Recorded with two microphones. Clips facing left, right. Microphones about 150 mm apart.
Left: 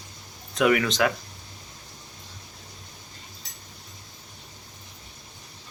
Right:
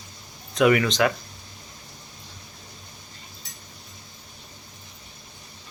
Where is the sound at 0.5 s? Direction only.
Centre (ahead or behind).